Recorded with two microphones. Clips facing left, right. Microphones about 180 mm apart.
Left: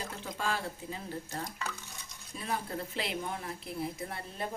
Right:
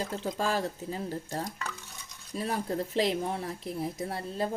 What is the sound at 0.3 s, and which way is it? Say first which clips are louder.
A woman's voice: right 4 dB; 40° right (ahead or behind).